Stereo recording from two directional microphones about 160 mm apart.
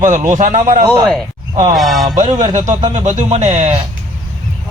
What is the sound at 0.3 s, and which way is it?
Speech, 50° right (ahead or behind).